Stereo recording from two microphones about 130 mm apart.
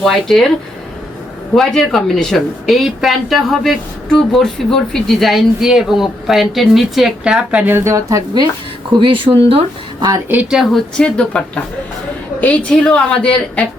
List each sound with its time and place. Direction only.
0.0 s a woman's voice: centre (ahead or behind)
1.5 s a woman's voice: centre (ahead or behind); by 8.4 s 25° right (ahead or behind)
8.9 s speech: 40° right (ahead or behind)
10.2 s speech: 15° right (ahead or behind)
10.6 s a woman's voice: centre (ahead or behind)